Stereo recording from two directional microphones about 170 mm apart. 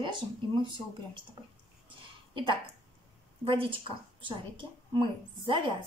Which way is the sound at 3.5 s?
30° right (ahead or behind).